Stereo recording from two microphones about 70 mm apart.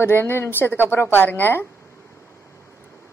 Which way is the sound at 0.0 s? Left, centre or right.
Left.